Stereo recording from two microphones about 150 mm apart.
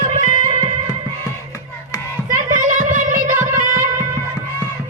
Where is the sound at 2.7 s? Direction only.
60° right (ahead or behind).